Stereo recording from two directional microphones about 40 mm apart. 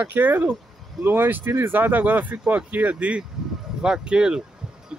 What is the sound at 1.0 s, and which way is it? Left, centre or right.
Speech, right.